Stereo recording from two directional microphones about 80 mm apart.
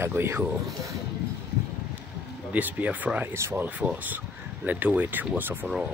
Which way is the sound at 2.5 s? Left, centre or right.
Centre.